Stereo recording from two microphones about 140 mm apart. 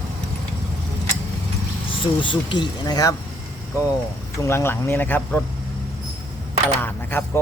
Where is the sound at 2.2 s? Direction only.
35° left (ahead or behind).